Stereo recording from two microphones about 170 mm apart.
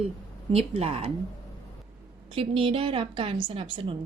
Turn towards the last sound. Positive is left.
turn(degrees=-30)  # may be behind; listen again after turning